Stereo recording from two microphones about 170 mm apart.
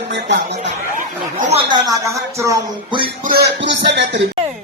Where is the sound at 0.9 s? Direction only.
50° right (ahead or behind).